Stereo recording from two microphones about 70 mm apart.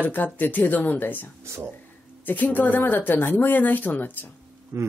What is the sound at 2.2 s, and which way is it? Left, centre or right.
Speech, left.